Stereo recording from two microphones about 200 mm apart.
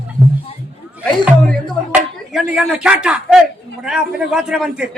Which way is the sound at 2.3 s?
5° right (ahead or behind).